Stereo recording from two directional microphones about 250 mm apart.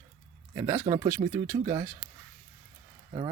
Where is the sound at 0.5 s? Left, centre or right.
Centre.